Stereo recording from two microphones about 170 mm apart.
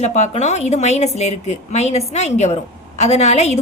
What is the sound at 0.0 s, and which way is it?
A woman's voice, 40° left (ahead or behind).